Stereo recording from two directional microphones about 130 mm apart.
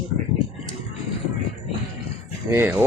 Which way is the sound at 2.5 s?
15° right (ahead or behind).